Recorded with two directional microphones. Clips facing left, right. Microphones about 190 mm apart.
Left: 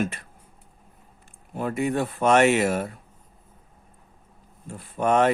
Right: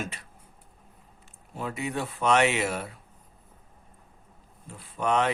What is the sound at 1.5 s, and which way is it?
Speech, 50° left (ahead or behind).